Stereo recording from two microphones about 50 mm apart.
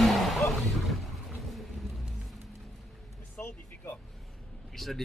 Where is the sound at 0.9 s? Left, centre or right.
Centre.